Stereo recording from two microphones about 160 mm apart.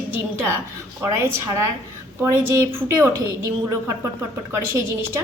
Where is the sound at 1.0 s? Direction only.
15° right (ahead or behind).